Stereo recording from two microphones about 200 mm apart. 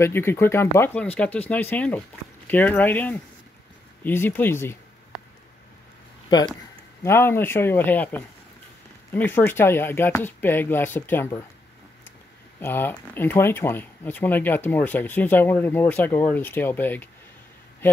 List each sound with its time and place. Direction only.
0.0 s speech: 10° left (ahead or behind)
7.0 s speech: 10° left (ahead or behind)
12.5 s speech: 10° left (ahead or behind)